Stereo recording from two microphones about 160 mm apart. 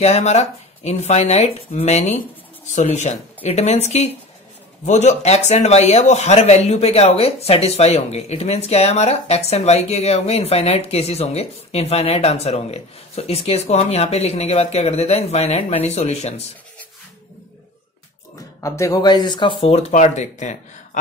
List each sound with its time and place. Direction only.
0.0 s speech: 45° left (ahead or behind)
18.6 s speech: 20° left (ahead or behind)
19.9 s speech: 50° left (ahead or behind)